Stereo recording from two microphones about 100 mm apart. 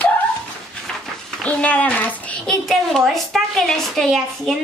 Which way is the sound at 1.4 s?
15° left (ahead or behind).